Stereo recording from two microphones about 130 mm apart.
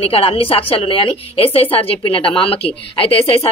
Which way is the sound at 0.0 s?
45° left (ahead or behind).